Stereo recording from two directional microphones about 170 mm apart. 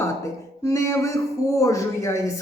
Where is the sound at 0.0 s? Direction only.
20° left (ahead or behind).